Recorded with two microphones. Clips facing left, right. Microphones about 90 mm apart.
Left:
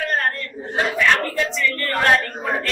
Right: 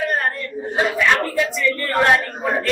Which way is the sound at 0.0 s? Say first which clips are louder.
Right 1 dB; 15° right (ahead or behind).